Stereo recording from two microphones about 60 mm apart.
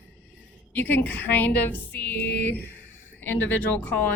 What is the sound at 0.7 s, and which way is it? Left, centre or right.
A woman's voice, left.